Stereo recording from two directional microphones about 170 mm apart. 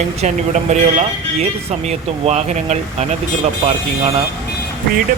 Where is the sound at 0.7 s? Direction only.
40° right (ahead or behind).